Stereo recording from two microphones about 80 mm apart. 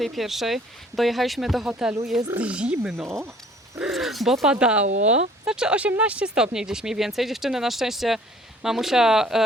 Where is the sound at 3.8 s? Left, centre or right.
Centre.